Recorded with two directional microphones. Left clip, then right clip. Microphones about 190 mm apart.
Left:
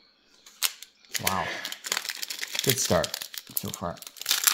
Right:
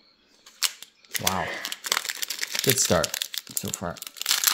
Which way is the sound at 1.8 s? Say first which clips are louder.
Right 4 dB; 5° right (ahead or behind).